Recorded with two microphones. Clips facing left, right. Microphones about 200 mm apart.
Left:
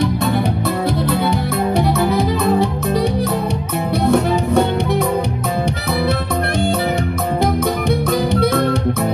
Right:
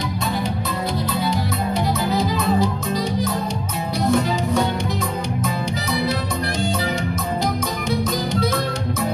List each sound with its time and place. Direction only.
2.0 s music: 60° left (ahead or behind)
4.0 s music: 60° left (ahead or behind)